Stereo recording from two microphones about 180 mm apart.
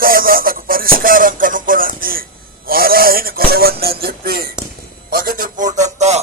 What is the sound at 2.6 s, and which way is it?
Music, 55° right (ahead or behind).